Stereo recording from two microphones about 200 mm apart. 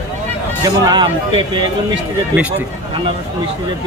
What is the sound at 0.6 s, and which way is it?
Speech, 20° right (ahead or behind).